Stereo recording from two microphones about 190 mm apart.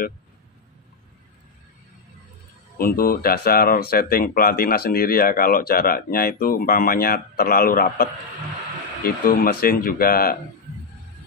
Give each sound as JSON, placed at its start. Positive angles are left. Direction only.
{"t": 2.8, "sound": "speech", "side_deg": 50}